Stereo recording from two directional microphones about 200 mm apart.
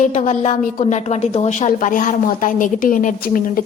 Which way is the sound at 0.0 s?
35° left (ahead or behind).